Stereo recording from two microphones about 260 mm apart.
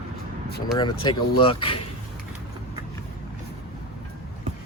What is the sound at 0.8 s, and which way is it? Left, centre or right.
Speech, centre.